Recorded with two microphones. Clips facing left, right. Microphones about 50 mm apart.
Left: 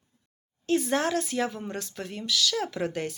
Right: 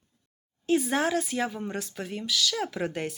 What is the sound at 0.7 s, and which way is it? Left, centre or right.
Speech, centre.